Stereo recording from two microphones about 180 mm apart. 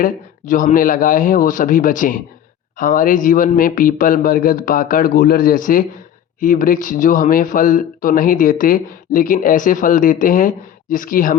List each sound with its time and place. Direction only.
0.0 s speech: 45° left (ahead or behind)